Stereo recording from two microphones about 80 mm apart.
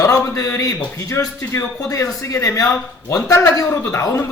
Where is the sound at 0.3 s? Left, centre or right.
Left.